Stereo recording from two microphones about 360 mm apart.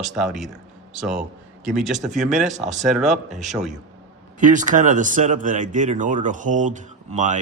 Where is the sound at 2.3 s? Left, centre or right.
Centre.